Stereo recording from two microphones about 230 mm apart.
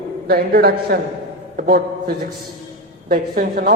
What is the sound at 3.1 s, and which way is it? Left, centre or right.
Speech, right.